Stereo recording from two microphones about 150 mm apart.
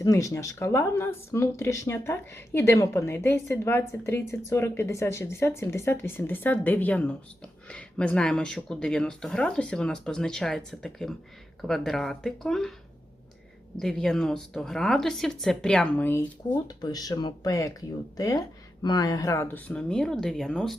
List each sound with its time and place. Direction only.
0.0 s speech: 20° left (ahead or behind); by 12.7 s centre (ahead or behind)
13.7 s speech: 5° left (ahead or behind)
16.6 s speech: 25° left (ahead or behind); by 20.7 s 5° left (ahead or behind)